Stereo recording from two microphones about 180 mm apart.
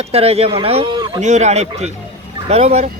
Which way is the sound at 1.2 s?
40° right (ahead or behind).